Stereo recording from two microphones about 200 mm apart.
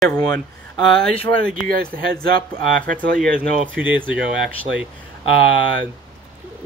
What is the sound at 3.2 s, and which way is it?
Speech, 5° right (ahead or behind).